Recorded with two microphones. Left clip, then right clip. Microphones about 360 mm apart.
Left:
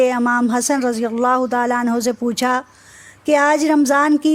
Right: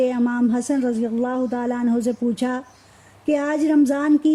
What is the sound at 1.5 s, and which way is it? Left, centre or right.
Speech, left.